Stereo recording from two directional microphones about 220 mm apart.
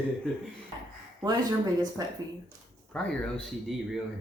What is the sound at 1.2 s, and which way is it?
Speech, 15° right (ahead or behind).